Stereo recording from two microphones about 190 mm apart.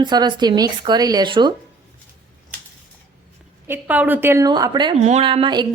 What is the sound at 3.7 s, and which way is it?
A woman's voice, 10° right (ahead or behind).